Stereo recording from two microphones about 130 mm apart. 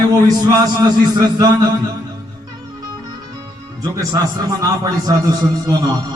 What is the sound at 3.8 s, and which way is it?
A man's voice, 30° right (ahead or behind).